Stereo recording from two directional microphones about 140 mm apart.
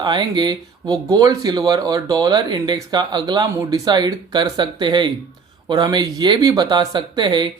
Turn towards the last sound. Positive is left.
turn(degrees=-30)  # may be behind; listen again after turning